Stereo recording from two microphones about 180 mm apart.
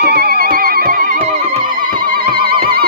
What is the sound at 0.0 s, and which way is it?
Music, 60° right (ahead or behind).